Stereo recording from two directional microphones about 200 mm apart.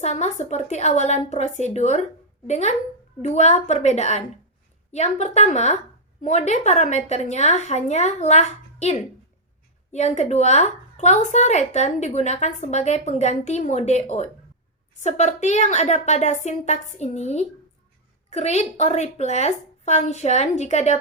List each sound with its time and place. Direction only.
0.0 s speech: 35° left (ahead or behind)